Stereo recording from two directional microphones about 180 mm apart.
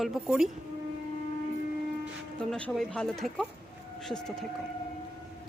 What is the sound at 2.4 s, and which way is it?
Speech, 5° left (ahead or behind).